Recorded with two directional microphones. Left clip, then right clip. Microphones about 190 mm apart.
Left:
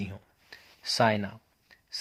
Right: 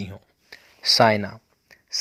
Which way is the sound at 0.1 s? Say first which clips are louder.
Right 5 dB; 35° right (ahead or behind).